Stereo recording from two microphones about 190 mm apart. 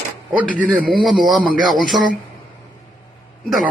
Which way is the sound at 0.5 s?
50° right (ahead or behind).